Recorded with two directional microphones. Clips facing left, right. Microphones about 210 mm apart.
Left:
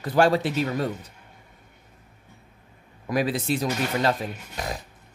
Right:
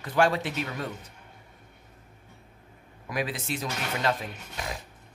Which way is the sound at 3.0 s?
35° left (ahead or behind).